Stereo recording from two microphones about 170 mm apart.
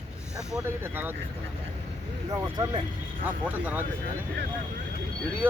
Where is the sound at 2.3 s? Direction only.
25° right (ahead or behind).